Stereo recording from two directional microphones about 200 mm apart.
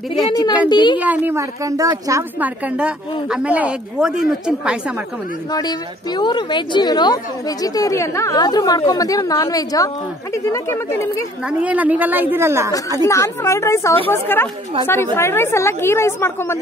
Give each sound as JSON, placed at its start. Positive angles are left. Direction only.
{"t": 0.7, "sound": "speech", "side_deg": 20}
{"t": 0.9, "sound": "a woman's voice", "side_deg": -10}
{"t": 5.5, "sound": "a woman's voice", "side_deg": 20}
{"t": 11.4, "sound": "a woman's voice", "side_deg": -5}
{"t": 13.0, "sound": "a woman's voice", "side_deg": 15}